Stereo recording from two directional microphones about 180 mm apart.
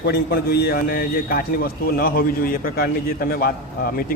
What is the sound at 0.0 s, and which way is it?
A man's voice, 60° left (ahead or behind).